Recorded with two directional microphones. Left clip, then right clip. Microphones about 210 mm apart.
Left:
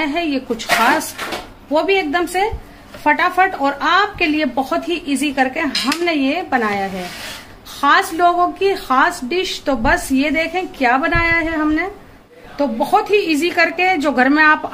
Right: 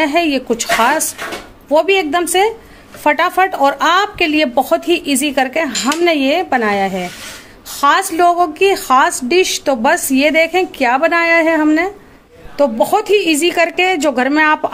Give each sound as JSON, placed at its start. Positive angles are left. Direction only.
{"t": 0.0, "sound": "a woman's voice", "side_deg": -45}